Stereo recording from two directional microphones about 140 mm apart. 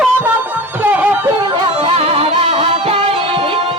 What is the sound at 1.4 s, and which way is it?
Music, 40° right (ahead or behind).